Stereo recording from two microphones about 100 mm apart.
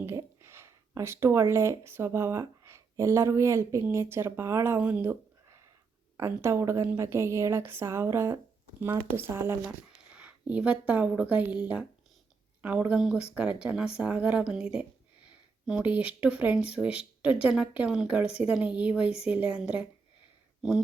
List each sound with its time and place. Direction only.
0.4 s speech: 30° right (ahead or behind)
6.1 s a woman's voice: 25° right (ahead or behind); by 20.8 s 5° right (ahead or behind)